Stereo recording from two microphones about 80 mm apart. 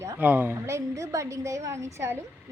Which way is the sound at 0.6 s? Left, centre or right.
Right.